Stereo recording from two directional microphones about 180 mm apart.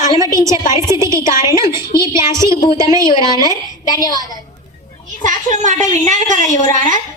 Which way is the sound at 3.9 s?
20° left (ahead or behind).